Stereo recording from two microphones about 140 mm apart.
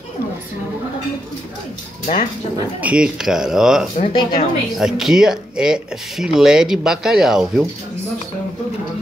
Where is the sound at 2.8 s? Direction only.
5° right (ahead or behind).